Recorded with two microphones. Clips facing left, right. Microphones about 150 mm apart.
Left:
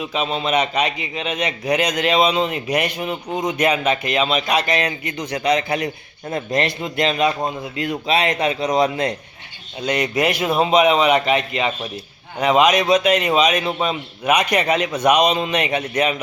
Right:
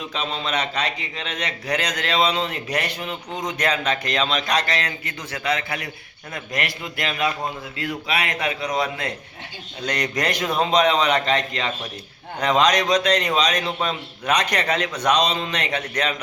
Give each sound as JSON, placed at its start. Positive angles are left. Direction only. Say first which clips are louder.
{"t": 0.0, "sound": "a man's voice", "louder": "left 5 dB", "side_deg": 10}
{"t": 9.8, "sound": "a man's voice", "louder": "left 5 dB", "side_deg": 10}